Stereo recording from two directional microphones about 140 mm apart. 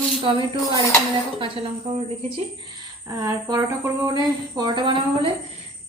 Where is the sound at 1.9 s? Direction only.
45° right (ahead or behind).